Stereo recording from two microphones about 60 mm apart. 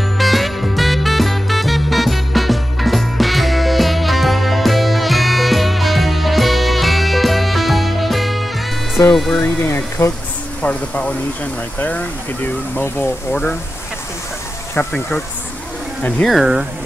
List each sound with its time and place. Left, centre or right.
0.2 s music: centre
9.1 s speech: centre
10.0 s speech: left
10.6 s speech: left
13.3 s speech: centre
14.9 s speech: centre